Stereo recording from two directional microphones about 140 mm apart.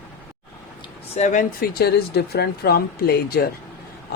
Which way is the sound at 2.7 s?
90° left.